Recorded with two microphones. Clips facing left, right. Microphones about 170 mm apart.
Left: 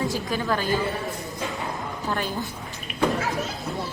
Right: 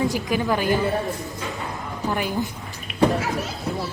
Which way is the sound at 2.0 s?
15° right (ahead or behind).